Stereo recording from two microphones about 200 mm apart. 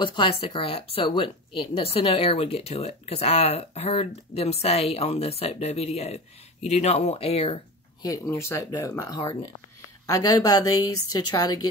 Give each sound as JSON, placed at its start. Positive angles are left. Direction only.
{"t": 0.0, "sound": "speech", "side_deg": 25}
{"t": 8.1, "sound": "a woman's voice", "side_deg": 15}